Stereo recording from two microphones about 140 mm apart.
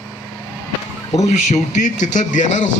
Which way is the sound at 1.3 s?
60° left (ahead or behind).